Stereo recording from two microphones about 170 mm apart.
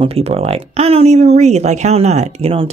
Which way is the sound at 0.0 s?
35° right (ahead or behind).